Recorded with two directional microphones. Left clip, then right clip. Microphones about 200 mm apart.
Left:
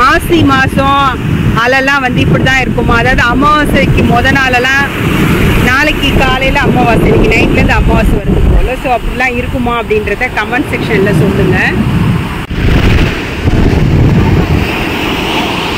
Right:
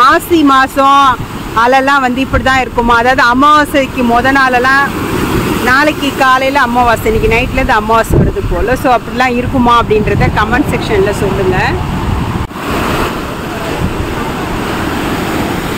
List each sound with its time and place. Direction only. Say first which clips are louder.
0.0 s speech: even; centre (ahead or behind)
6.1 s speech: right 2 dB; 10° right (ahead or behind)
8.8 s speech: even; 20° right (ahead or behind)